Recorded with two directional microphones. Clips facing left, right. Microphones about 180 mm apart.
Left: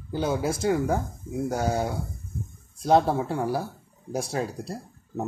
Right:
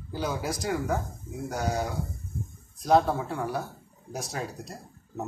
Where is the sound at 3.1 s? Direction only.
30° left (ahead or behind).